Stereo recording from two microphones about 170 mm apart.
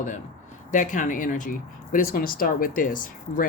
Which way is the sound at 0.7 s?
50° left (ahead or behind).